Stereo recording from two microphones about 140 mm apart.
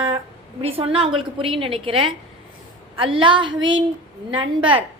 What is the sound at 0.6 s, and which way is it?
A woman's voice, 40° right (ahead or behind).